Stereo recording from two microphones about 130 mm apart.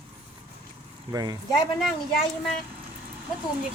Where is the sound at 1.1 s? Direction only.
30° right (ahead or behind).